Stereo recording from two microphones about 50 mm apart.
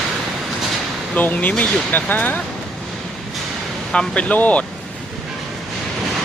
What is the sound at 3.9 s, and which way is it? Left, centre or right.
Speech, left.